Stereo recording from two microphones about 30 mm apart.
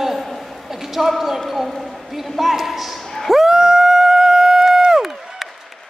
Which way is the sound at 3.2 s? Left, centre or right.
Centre.